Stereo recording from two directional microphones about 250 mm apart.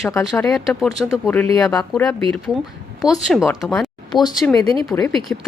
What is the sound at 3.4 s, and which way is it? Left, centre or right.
Speech, centre.